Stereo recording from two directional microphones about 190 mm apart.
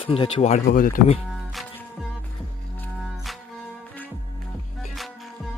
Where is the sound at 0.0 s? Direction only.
30° left (ahead or behind).